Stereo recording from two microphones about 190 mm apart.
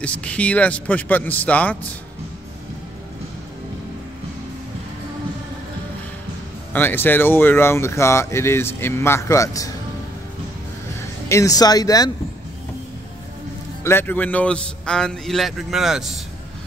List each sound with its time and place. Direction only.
0.0 s speech: 5° left (ahead or behind)
6.7 s speech: 10° left (ahead or behind)
11.2 s speech: 15° left (ahead or behind)
13.8 s a man's voice: 10° left (ahead or behind)